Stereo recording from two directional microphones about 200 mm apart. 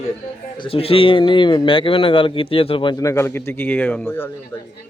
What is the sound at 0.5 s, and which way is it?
Speech, 25° left (ahead or behind).